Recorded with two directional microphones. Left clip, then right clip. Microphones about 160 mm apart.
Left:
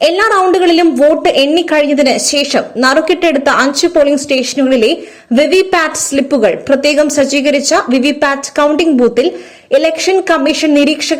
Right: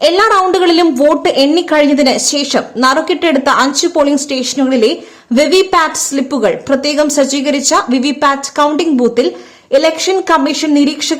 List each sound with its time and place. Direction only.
0.0 s a woman's voice: 10° left (ahead or behind)